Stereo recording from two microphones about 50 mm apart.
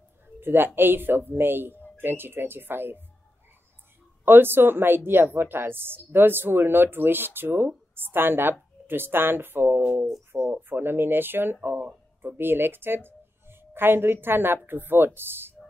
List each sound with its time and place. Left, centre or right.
0.4 s a woman's voice: right
4.2 s a woman's voice: right